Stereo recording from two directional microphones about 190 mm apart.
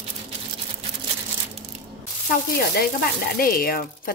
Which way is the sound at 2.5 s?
55° left (ahead or behind).